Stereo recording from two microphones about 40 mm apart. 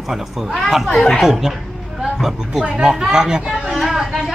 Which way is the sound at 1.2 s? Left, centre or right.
Centre.